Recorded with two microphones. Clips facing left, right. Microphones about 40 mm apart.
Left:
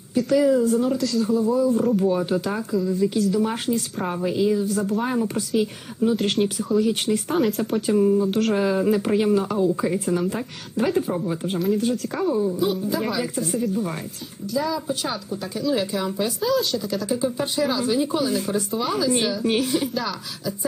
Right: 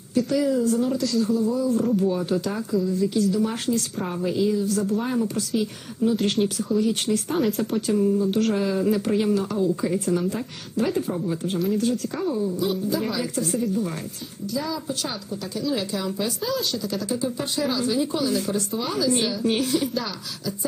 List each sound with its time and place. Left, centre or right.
0.1 s speech: centre
0.3 s speech: centre
1.3 s speech: centre
3.2 s speech: centre
3.4 s speech: centre
7.9 s speech: centre
8.3 s speech: centre
8.5 s speech: centre
12.9 s speech: centre
16.4 s speech: centre